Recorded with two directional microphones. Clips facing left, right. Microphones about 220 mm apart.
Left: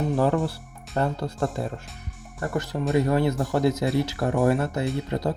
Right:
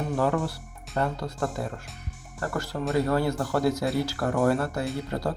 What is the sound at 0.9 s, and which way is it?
Speech, 30° left (ahead or behind).